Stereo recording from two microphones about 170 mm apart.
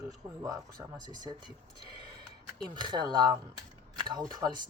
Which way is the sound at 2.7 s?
25° right (ahead or behind).